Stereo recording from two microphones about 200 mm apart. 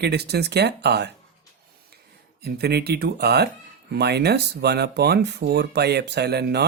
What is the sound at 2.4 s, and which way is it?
Speech, 55° right (ahead or behind).